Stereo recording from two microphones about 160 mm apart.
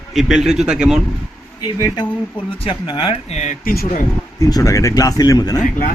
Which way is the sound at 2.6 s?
30° left (ahead or behind).